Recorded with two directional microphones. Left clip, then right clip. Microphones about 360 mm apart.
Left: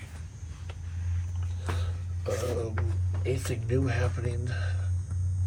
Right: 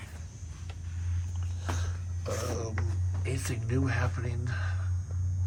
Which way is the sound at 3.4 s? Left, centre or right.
Centre.